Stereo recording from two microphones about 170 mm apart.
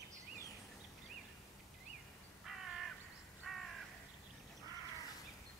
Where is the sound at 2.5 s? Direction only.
Centre (ahead or behind).